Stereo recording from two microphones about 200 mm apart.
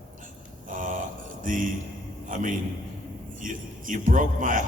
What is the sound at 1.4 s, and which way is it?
A man's voice, 40° right (ahead or behind).